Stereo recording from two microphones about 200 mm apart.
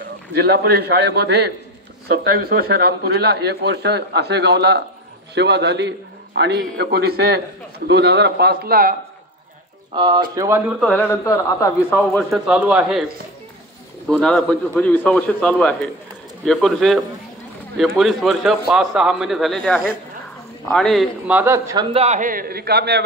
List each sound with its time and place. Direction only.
0.3 s a man's voice: 55° right (ahead or behind)
9.9 s speech: 20° right (ahead or behind)
10.8 s speech: 10° left (ahead or behind)
12.3 s a man's voice: 5° right (ahead or behind)
14.0 s a man's voice: 5° left (ahead or behind); by 21.8 s 15° right (ahead or behind)
21.9 s a man's voice: 35° right (ahead or behind); by 23.0 s 55° right (ahead or behind)